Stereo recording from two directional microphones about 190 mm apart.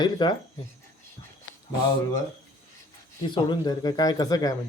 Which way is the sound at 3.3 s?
25° left (ahead or behind).